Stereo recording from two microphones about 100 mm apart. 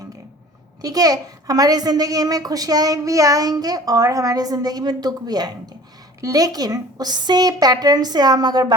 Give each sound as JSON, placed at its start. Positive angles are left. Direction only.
{"t": 0.8, "sound": "a child's voice", "side_deg": -40}